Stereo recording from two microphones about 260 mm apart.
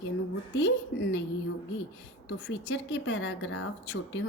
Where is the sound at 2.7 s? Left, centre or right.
Left.